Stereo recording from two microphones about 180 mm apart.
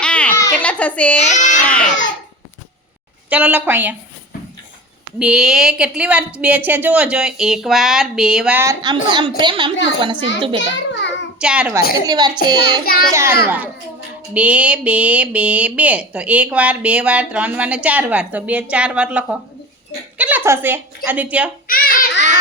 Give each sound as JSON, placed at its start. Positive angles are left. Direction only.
{"t": 0.0, "sound": "a sound", "side_deg": 5}
{"t": 0.7, "sound": "a child's voice", "side_deg": 5}
{"t": 1.2, "sound": "a child's voice", "side_deg": 40}
{"t": 1.6, "sound": "a child's voice", "side_deg": 10}
{"t": 3.2, "sound": "speech", "side_deg": -10}
{"t": 5.2, "sound": "a woman's voice", "side_deg": -5}
{"t": 8.6, "sound": "a woman's voice", "side_deg": -25}
{"t": 10.6, "sound": "a child's voice", "side_deg": 75}
{"t": 11.3, "sound": "a child's voice", "side_deg": -5}
{"t": 12.0, "sound": "a woman's voice", "side_deg": -20}
{"t": 12.8, "sound": "a child's voice", "side_deg": 55}
{"t": 13.1, "sound": "speech", "side_deg": -15}
{"t": 21.7, "sound": "child singing", "side_deg": 55}